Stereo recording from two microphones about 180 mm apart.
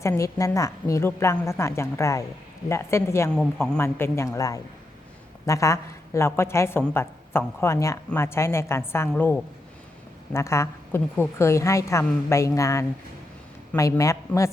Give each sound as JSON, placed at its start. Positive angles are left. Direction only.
{"t": 0.0, "sound": "a woman's voice", "side_deg": 15}